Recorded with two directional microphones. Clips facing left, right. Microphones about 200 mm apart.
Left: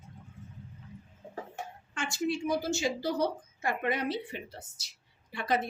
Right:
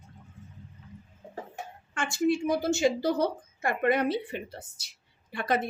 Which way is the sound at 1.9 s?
55° right (ahead or behind).